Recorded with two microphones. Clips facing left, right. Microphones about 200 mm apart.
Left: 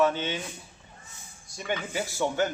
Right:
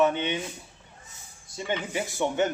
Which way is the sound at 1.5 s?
25° right (ahead or behind).